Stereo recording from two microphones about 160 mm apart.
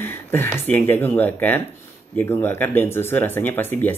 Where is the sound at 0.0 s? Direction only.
15° left (ahead or behind).